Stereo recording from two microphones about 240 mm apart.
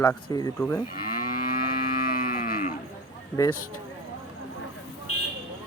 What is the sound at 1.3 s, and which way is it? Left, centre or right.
Livestock, left.